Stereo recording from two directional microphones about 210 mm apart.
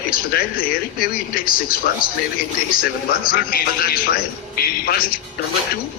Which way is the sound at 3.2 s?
45° left (ahead or behind).